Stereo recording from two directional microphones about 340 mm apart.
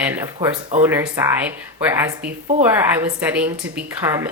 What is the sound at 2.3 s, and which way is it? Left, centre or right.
Speech, right.